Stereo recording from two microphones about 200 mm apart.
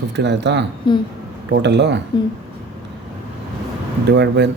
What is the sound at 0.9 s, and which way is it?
Speech, 25° left (ahead or behind).